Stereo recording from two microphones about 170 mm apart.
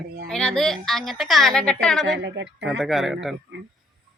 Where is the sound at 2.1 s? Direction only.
90° right.